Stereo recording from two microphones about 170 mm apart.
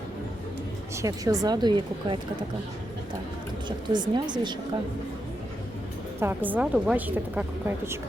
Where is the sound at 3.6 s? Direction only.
25° right (ahead or behind).